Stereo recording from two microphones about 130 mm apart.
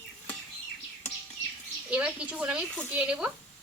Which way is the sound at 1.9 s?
10° right (ahead or behind).